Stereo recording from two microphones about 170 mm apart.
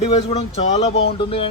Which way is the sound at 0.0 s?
35° left (ahead or behind).